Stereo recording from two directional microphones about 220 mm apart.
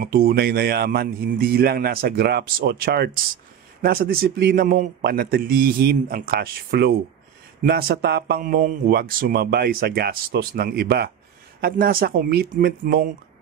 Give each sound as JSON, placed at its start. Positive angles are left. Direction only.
{"t": 0.0, "sound": "a man's voice", "side_deg": -45}